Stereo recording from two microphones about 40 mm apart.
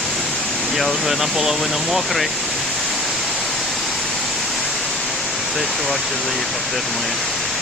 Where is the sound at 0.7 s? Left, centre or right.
Centre.